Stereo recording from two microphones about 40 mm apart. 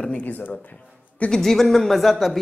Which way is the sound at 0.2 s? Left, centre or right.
Left.